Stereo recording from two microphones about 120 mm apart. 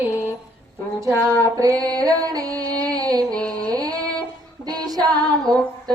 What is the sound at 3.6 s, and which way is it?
Female singing, 30° right (ahead or behind).